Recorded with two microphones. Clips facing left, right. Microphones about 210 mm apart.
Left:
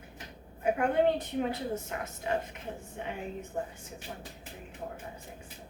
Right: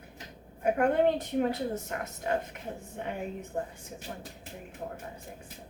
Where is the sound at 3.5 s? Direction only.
40° right (ahead or behind).